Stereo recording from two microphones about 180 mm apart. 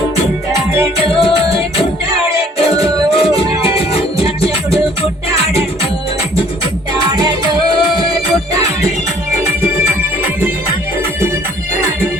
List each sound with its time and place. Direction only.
1.1 s music: 30° left (ahead or behind)
3.2 s music: 30° left (ahead or behind)
7.1 s music: 20° right (ahead or behind)